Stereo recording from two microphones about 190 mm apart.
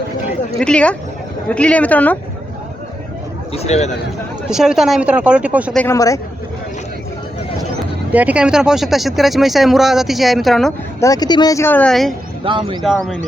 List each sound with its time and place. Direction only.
0.6 s speech: 5° left (ahead or behind)
3.5 s a man's voice: 35° left (ahead or behind)
4.4 s speech: 5° right (ahead or behind)
5.7 s speech: 10° left (ahead or behind)
8.1 s speech: 5° right (ahead or behind)
11.0 s speech: 20° left (ahead or behind); by 12.1 s centre (ahead or behind)
12.5 s speech: 25° right (ahead or behind)
12.8 s speech: centre (ahead or behind)